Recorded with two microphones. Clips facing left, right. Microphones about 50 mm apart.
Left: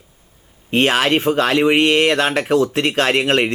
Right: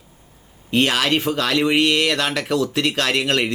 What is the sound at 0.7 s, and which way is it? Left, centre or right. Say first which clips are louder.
A man's voice: left 3 dB; left.